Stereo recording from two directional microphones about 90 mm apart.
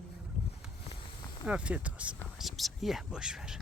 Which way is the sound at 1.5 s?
15° right (ahead or behind).